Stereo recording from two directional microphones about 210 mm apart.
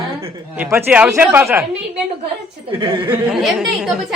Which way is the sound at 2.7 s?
25° right (ahead or behind).